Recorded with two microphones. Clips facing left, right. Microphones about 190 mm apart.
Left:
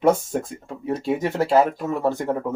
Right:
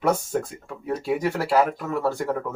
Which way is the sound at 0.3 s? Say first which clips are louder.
Even; 20° left (ahead or behind).